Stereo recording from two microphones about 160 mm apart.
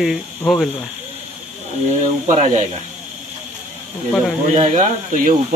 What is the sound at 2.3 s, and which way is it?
Speech, 50° right (ahead or behind).